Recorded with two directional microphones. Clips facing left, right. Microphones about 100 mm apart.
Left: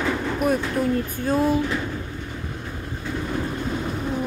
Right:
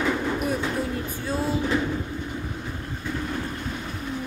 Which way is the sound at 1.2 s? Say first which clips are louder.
Left 6 dB; 50° left (ahead or behind).